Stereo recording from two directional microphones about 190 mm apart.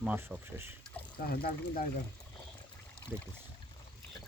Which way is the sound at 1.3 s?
50° left (ahead or behind).